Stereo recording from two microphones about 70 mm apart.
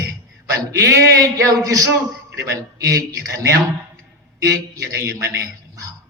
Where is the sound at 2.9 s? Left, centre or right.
Right.